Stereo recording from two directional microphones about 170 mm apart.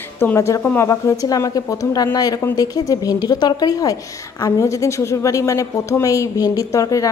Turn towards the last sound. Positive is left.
turn(degrees=20)  # may be behind; listen again after turning